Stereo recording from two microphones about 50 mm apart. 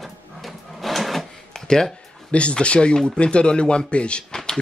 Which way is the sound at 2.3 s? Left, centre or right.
Left.